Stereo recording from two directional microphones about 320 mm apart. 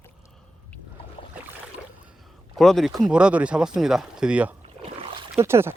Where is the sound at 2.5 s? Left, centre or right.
Centre.